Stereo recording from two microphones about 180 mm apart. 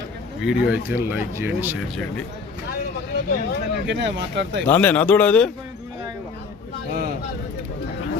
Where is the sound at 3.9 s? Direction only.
80° right.